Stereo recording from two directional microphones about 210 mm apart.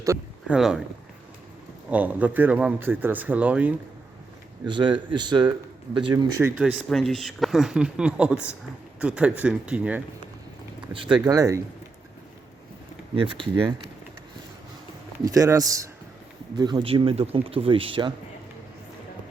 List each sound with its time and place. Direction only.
0.0 s boat: 15° right (ahead or behind)
0.5 s speech: 5° right (ahead or behind)
1.9 s speech: 5° right (ahead or behind)
4.6 s a man's voice: 20° right (ahead or behind)
6.6 s speech: centre (ahead or behind)
10.9 s speech: 25° right (ahead or behind)
13.1 s a man's voice: 25° right (ahead or behind)
15.2 s a man's voice: 15° right (ahead or behind)